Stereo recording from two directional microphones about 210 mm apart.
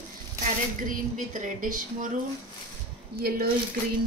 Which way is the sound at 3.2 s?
45° right (ahead or behind).